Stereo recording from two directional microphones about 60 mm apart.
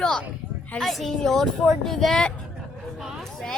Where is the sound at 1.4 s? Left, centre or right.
Centre.